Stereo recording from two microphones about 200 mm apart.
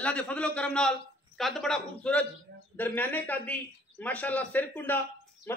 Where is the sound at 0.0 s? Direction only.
5° left (ahead or behind).